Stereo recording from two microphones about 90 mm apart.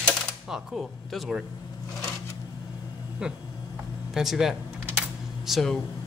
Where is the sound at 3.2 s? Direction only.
10° right (ahead or behind).